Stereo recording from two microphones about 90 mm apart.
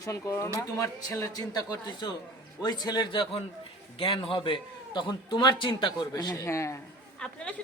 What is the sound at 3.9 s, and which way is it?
Speech, 90° left.